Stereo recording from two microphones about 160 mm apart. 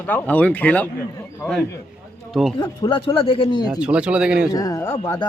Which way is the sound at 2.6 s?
30° left (ahead or behind).